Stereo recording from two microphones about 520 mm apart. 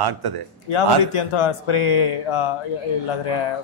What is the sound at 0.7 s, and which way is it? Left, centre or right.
Speech, left.